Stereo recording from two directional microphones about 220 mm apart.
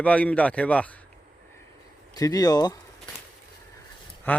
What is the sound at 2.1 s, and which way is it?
Speech, 15° left (ahead or behind).